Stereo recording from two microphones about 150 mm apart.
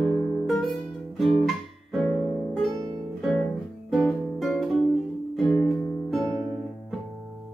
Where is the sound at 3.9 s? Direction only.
5° left (ahead or behind).